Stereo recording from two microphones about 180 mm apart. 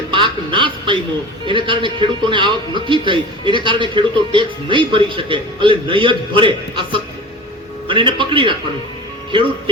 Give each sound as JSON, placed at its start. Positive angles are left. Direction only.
{"t": 0.1, "sound": "music", "side_deg": -25}
{"t": 1.5, "sound": "a man's voice", "side_deg": -30}